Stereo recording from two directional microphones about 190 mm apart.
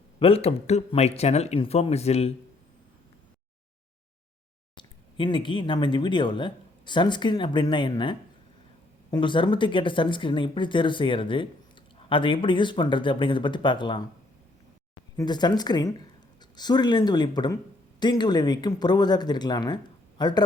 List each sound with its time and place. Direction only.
0.2 s speech: 30° left (ahead or behind)
4.8 s speech: 25° left (ahead or behind)
15.1 s speech: 20° left (ahead or behind)